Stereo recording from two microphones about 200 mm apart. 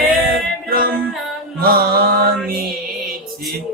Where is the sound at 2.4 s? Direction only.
50° right (ahead or behind).